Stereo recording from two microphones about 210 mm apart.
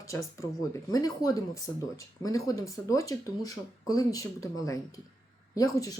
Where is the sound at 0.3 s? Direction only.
15° left (ahead or behind).